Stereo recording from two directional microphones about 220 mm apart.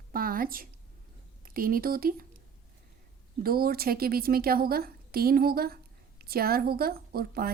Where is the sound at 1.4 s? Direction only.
40° right (ahead or behind).